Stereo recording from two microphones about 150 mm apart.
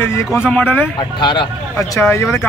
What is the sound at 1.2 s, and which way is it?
Speech, 30° left (ahead or behind).